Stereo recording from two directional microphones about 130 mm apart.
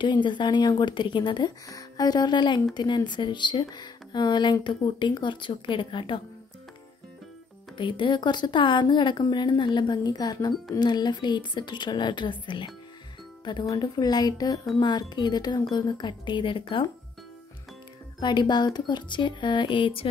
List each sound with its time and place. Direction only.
0.0 s speech: 35° left (ahead or behind)
7.7 s speech: 40° left (ahead or behind)
18.2 s speech: 35° left (ahead or behind)